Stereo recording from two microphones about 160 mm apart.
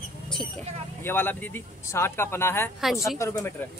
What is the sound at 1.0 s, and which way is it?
Speech, 15° left (ahead or behind).